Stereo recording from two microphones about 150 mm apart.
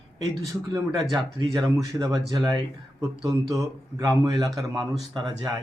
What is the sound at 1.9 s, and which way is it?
Speech, 25° right (ahead or behind).